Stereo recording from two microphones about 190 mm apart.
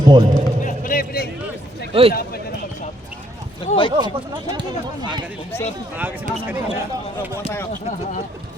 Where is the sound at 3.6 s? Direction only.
25° left (ahead or behind).